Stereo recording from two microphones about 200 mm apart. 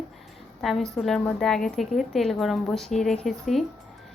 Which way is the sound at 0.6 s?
Centre (ahead or behind).